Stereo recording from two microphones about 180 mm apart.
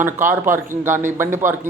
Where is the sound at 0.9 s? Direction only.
45° right (ahead or behind).